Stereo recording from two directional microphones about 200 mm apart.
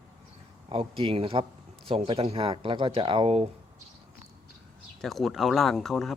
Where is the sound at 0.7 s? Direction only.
25° right (ahead or behind).